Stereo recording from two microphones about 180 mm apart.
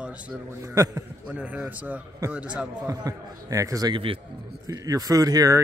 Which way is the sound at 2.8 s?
20° right (ahead or behind).